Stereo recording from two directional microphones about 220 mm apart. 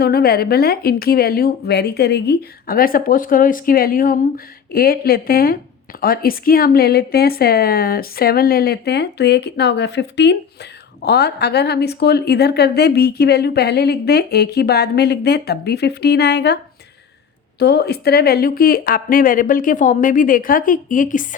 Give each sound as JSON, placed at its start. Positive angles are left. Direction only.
{"t": 0.0, "sound": "a woman's voice", "side_deg": 45}
{"t": 17.6, "sound": "speech", "side_deg": 45}